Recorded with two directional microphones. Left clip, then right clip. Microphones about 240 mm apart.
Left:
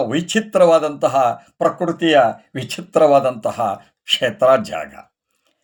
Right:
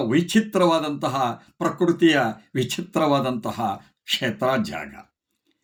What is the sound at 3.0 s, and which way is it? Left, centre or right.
Speech, centre.